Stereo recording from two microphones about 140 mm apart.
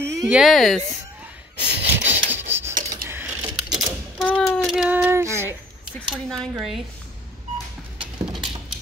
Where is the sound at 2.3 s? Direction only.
15° right (ahead or behind).